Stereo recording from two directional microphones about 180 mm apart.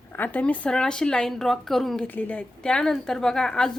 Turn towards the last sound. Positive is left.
turn(degrees=5)  # may be behind; listen again after turning